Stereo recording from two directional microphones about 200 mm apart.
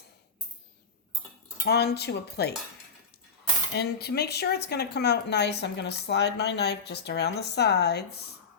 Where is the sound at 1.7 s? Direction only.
55° left (ahead or behind).